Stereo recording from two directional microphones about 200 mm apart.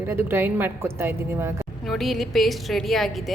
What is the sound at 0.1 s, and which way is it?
A woman's voice, 10° right (ahead or behind).